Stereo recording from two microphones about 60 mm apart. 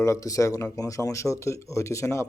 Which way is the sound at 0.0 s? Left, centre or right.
Left.